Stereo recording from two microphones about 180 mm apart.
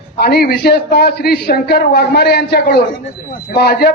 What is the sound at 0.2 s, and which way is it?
A man's voice, 60° left (ahead or behind).